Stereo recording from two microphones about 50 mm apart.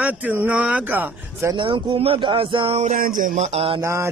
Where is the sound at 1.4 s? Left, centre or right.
Right.